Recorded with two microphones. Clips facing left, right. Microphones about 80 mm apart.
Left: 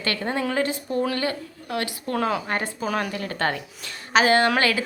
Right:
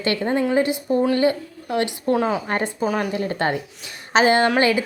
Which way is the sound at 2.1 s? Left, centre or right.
Centre.